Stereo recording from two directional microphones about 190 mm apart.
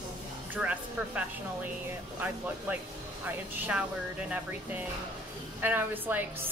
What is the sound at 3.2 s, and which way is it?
A woman's voice, 10° right (ahead or behind).